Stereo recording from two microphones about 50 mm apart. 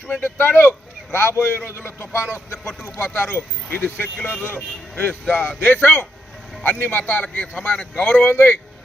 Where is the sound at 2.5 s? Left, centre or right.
Left.